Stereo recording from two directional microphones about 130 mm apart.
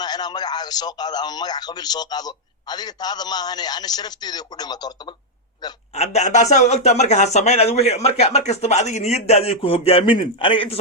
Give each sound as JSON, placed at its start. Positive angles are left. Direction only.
{"t": 0.0, "sound": "a man's voice", "side_deg": 30}
{"t": 5.9, "sound": "speech", "side_deg": 55}